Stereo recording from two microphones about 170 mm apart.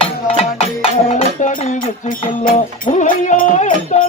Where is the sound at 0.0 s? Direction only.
35° left (ahead or behind).